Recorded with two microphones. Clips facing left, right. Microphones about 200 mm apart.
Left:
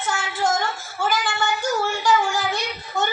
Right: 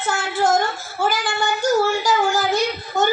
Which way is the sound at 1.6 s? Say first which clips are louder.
Right 6 dB; 35° right (ahead or behind).